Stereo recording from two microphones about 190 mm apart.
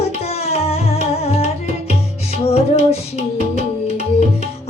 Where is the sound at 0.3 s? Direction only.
35° left (ahead or behind).